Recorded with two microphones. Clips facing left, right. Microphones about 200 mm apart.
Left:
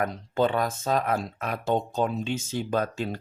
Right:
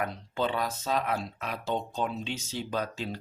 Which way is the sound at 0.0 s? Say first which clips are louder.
Left 6 dB; 45° left (ahead or behind).